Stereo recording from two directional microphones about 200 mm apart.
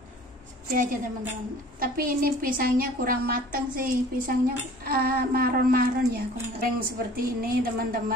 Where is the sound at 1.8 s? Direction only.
45° right (ahead or behind).